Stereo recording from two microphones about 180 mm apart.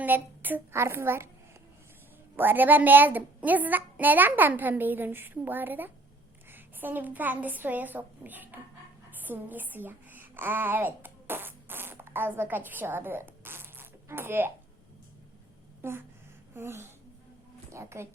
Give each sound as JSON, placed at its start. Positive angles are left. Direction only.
{"t": 0.0, "sound": "a woman's voice", "side_deg": -10}
{"t": 2.3, "sound": "a woman's voice", "side_deg": -10}
{"t": 15.8, "sound": "a woman's voice", "side_deg": -15}